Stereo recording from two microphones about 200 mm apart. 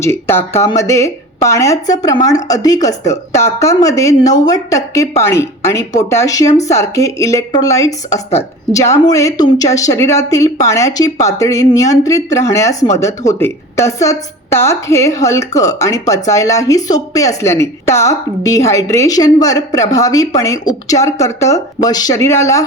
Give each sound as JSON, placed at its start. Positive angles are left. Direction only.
{"t": 0.0, "sound": "a woman's voice", "side_deg": 10}
{"t": 8.1, "sound": "a woman's voice", "side_deg": 30}
{"t": 8.7, "sound": "a woman's voice", "side_deg": 15}